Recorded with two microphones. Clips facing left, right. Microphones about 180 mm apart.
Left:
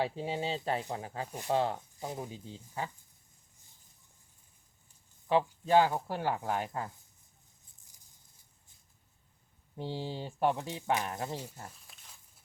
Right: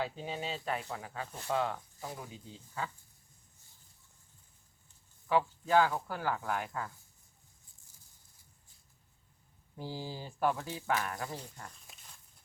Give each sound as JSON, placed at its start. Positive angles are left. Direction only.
{"t": 0.0, "sound": "speech", "side_deg": 25}
{"t": 1.3, "sound": "speech", "side_deg": 15}
{"t": 1.5, "sound": "speech", "side_deg": 30}
{"t": 5.3, "sound": "speech", "side_deg": 25}
{"t": 9.7, "sound": "speech", "side_deg": 25}